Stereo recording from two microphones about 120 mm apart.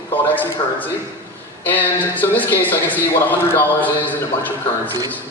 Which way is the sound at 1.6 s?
15° left (ahead or behind).